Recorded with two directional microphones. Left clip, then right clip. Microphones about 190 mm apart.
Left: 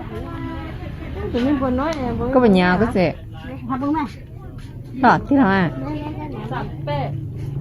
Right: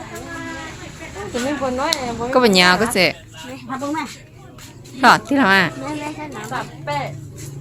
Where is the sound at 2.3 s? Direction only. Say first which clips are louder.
Right 3 dB; 30° right (ahead or behind).